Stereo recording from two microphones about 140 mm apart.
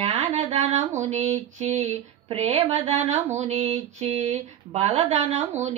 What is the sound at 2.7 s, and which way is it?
Female singing, 55° right (ahead or behind).